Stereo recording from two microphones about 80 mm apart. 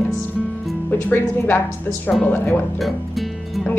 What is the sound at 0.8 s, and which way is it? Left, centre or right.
Speech, left.